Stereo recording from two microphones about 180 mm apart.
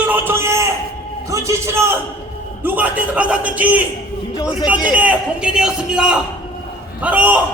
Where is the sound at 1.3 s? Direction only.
15° right (ahead or behind).